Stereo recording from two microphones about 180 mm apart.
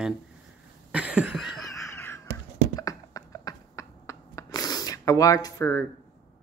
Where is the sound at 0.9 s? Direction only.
5° right (ahead or behind).